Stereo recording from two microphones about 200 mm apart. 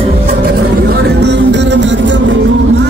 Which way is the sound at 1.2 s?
60° right (ahead or behind).